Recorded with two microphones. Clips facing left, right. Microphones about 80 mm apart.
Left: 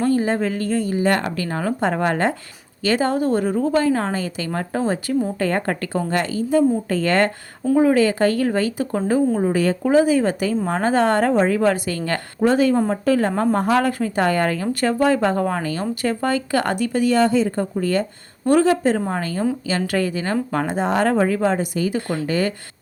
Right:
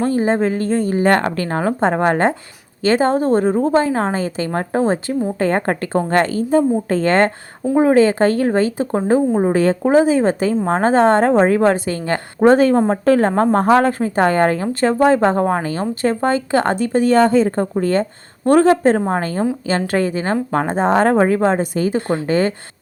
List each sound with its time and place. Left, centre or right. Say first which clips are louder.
0.0 s a woman's voice: right 3 dB; right
12.4 s a woman's voice: right 5 dB; right